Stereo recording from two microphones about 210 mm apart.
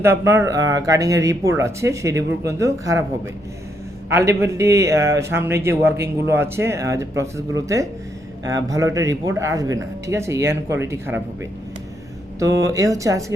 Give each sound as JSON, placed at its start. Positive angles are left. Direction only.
{"t": 0.0, "sound": "a man's voice", "side_deg": -10}
{"t": 4.1, "sound": "a man's voice", "side_deg": -15}
{"t": 12.4, "sound": "a man's voice", "side_deg": -15}